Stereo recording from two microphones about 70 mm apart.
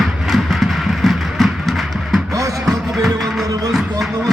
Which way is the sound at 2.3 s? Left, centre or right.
Right.